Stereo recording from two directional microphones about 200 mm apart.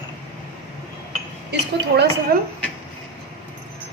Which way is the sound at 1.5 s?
55° right (ahead or behind).